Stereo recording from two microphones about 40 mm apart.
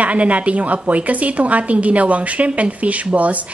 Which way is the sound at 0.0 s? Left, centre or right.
Right.